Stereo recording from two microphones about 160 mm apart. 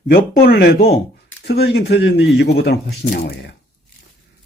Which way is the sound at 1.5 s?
90° left.